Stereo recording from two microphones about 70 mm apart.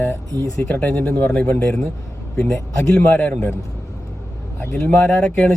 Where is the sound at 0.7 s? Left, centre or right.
Centre.